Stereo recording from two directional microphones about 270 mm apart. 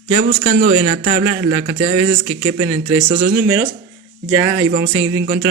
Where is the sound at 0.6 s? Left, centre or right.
Centre.